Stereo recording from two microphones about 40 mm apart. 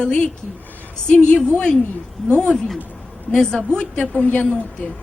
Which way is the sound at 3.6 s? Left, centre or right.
Left.